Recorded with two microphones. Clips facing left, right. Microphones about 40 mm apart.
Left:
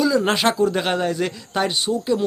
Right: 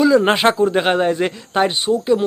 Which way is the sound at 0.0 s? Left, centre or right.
Right.